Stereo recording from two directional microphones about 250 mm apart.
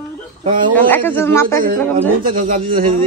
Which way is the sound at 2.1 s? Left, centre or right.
Right.